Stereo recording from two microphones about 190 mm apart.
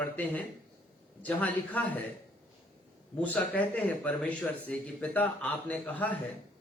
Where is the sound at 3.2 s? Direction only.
10° left (ahead or behind).